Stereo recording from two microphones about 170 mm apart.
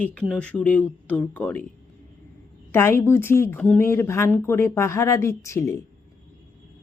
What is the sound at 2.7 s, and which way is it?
Speech, 15° left (ahead or behind).